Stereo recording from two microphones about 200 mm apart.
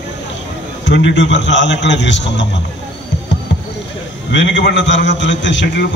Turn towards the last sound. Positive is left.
turn(degrees=65)  # may be behind; listen again after turning